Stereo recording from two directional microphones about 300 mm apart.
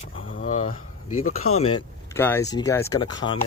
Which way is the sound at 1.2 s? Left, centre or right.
Left.